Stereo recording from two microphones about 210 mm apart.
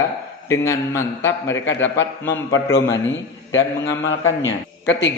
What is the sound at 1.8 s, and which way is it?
A man's voice, 65° left (ahead or behind).